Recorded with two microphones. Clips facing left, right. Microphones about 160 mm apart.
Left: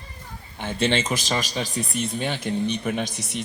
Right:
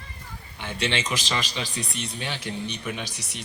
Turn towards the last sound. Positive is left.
turn(degrees=50)  # may be behind; listen again after turning